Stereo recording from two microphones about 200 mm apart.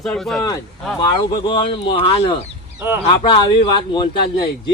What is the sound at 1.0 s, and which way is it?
Speech, 25° left (ahead or behind).